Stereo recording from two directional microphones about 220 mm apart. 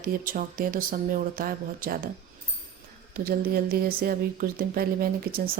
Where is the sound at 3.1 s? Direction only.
40° right (ahead or behind).